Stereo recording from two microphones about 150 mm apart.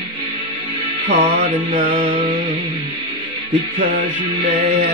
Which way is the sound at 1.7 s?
60° right (ahead or behind).